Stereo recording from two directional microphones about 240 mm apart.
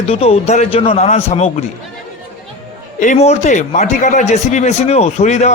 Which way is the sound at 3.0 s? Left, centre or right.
Left.